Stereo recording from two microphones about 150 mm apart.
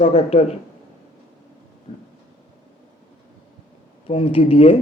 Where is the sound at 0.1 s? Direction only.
45° left (ahead or behind).